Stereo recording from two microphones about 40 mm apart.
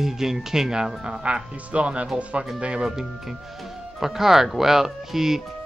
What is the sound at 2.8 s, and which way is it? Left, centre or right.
Speech, centre.